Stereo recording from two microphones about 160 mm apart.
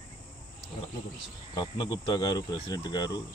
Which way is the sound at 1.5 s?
30° left (ahead or behind).